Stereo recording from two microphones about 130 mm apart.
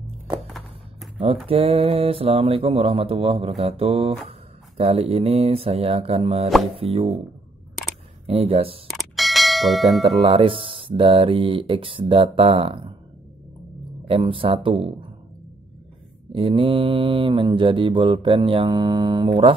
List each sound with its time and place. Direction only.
1.5 s speech: 50° right (ahead or behind)
8.3 s speech: 50° right (ahead or behind)
8.8 s bell: centre (ahead or behind)
10.2 s speech: 45° right (ahead or behind)
14.0 s speech: 45° right (ahead or behind)
16.3 s mantra: 40° right (ahead or behind)